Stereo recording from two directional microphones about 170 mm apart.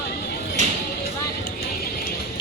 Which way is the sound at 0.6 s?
45° right (ahead or behind).